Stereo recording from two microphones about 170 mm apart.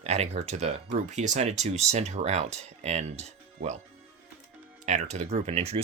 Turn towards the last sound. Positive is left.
turn(degrees=-35)  # may be behind; listen again after turning